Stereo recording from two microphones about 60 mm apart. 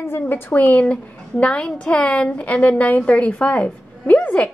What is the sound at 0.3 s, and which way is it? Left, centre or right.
A woman's voice, left.